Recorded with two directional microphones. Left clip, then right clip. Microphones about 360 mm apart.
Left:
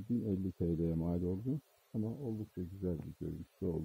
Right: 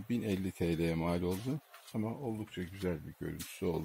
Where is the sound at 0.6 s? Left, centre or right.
Centre.